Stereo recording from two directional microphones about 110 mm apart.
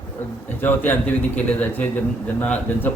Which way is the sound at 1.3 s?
15° left (ahead or behind).